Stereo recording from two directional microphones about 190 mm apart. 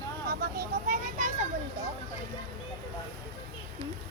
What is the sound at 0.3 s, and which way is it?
Vehicle, 50° right (ahead or behind).